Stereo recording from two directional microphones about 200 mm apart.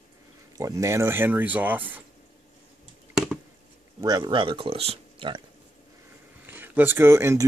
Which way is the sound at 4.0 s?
20° right (ahead or behind).